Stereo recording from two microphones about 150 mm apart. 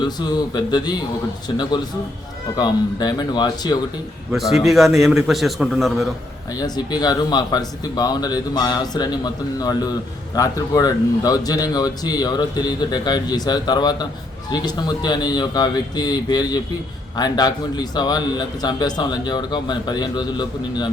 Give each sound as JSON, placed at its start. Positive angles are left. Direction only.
{"t": 0.2, "sound": "a man's voice", "side_deg": 25}
{"t": 4.3, "sound": "a man's voice", "side_deg": 0}
{"t": 6.6, "sound": "a man's voice", "side_deg": 30}